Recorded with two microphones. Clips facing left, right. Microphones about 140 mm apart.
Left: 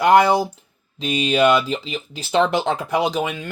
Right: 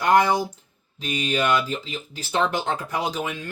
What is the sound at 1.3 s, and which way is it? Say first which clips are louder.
Speech: left 6 dB; 90° left.